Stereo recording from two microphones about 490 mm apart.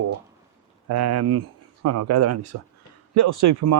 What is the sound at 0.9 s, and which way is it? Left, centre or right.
A man's voice, right.